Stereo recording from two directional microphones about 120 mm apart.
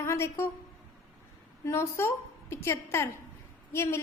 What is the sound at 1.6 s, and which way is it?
A woman's voice, 20° left (ahead or behind).